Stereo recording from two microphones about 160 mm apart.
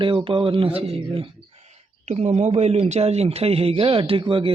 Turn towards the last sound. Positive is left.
turn(degrees=-30)  # may be behind; listen again after turning